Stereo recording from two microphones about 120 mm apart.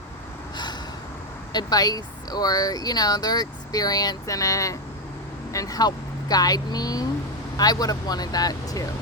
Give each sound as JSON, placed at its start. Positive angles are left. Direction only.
{"t": 0.5, "sound": "gasp", "side_deg": 40}
{"t": 1.5, "sound": "speech", "side_deg": 30}